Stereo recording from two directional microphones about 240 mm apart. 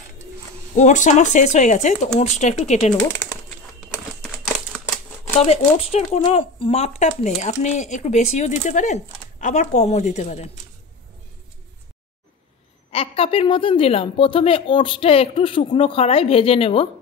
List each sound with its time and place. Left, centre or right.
0.7 s speech: left
5.4 s speech: left
12.9 s speech: left